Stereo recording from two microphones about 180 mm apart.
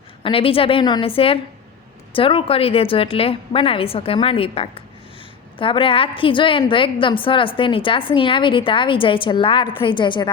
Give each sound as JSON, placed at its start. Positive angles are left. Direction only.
{"t": 0.2, "sound": "a woman's voice", "side_deg": 30}